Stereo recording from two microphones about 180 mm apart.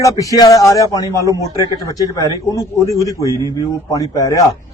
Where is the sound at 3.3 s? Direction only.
20° right (ahead or behind).